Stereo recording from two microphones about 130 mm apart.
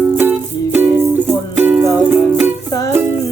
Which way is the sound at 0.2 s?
15° right (ahead or behind).